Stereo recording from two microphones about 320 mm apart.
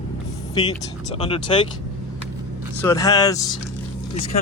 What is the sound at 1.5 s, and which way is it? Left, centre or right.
Speech, centre.